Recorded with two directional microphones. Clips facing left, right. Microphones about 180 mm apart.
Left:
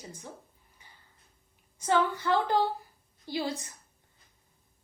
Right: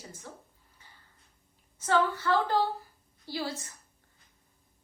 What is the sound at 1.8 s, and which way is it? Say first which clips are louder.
A woman's voice: even; 15° left (ahead or behind).